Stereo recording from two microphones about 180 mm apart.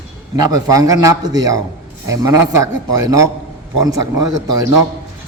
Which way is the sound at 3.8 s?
20° right (ahead or behind).